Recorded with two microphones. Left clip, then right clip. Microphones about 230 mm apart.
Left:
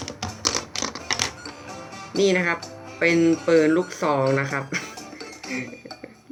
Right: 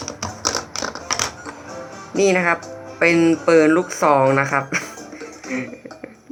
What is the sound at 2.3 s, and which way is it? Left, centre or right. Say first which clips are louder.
A man's voice: right 5 dB; centre.